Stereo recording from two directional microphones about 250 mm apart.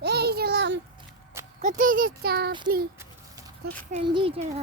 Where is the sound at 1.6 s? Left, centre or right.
Right.